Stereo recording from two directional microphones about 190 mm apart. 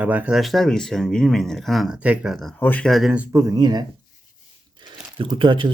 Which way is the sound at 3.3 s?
15° right (ahead or behind).